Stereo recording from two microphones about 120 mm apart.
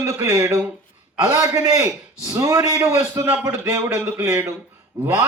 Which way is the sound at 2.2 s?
25° right (ahead or behind).